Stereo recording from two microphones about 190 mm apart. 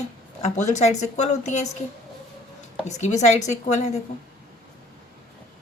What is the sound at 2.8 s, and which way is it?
Speech, 40° left (ahead or behind).